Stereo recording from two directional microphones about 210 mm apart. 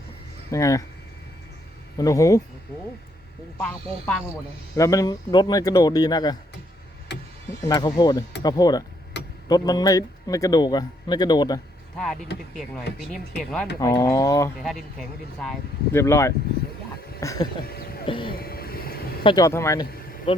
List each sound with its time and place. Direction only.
0.5 s a man's voice: 15° left (ahead or behind)
2.0 s a man's voice: 15° left (ahead or behind)
3.6 s a man's voice: 5° left (ahead or behind)
7.1 s a sound: 55° left (ahead or behind)
7.6 s a man's voice: 20° left (ahead or behind)
9.2 s a sound: 55° left (ahead or behind)
9.5 s a man's voice: 15° left (ahead or behind)
12.3 s speech: 50° left (ahead or behind)
13.7 s a man's voice: 15° left (ahead or behind)
14.6 s a man's voice: centre (ahead or behind); by 17.5 s 15° left (ahead or behind)
18.0 s a sound: 25° left (ahead or behind)
18.3 s vehicle: 45° left (ahead or behind)
19.2 s a man's voice: 20° left (ahead or behind)
20.3 s speech: 25° left (ahead or behind)